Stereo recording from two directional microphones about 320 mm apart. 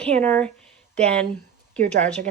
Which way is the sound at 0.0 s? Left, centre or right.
Centre.